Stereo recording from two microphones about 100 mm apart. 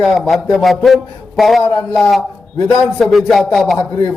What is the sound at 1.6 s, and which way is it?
Speech, 20° left (ahead or behind).